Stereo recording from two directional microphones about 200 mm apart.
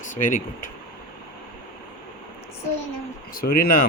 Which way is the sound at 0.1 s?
40° left (ahead or behind).